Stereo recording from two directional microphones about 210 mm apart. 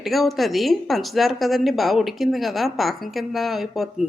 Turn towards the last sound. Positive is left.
turn(degrees=0)  # may be behind; listen again after turning